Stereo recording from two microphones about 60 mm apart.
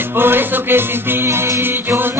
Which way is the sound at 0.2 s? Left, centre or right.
Right.